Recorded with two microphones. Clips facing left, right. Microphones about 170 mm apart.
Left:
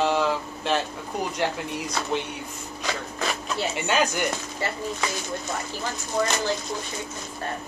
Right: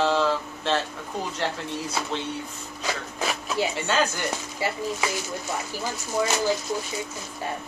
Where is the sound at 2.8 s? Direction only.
10° right (ahead or behind).